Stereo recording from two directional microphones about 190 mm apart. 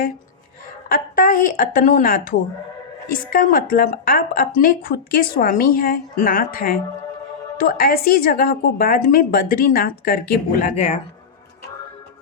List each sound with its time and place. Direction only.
0.9 s speech: 50° left (ahead or behind)
10.8 s speech: 35° left (ahead or behind)